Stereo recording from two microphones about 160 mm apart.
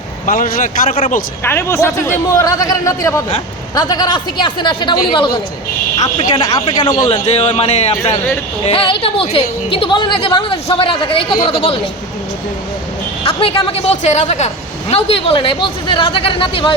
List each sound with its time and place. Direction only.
0.3 s a man's voice: 55° left (ahead or behind)
0.9 s speech: 40° left (ahead or behind)
1.5 s a man's voice: 15° left (ahead or behind)
7.3 s speech: 40° left (ahead or behind)
13.2 s speech: 35° left (ahead or behind)